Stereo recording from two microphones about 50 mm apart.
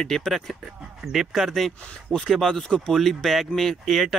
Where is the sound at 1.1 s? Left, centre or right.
Centre.